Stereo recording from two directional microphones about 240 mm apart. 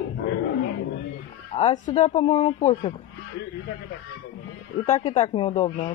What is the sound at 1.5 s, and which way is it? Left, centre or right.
A woman's voice, left.